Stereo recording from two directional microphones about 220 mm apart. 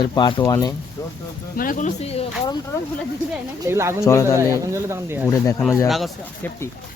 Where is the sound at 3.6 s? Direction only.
10° right (ahead or behind).